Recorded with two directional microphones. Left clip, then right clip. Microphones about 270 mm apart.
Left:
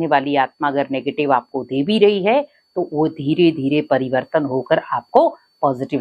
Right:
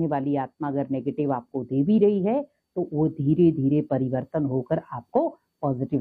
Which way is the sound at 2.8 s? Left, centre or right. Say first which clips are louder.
Left 7 dB; left.